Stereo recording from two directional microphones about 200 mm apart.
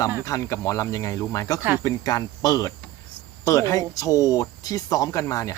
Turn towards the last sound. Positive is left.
turn(degrees=15)  # may be behind; listen again after turning